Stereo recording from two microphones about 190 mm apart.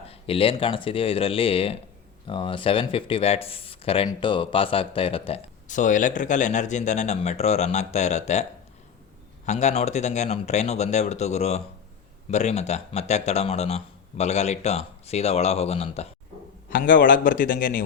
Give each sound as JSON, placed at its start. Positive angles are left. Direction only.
{"t": 0.1, "sound": "speech", "side_deg": 30}
{"t": 5.6, "sound": "speech", "side_deg": 40}
{"t": 9.5, "sound": "speech", "side_deg": 35}
{"t": 16.6, "sound": "a man's voice", "side_deg": 45}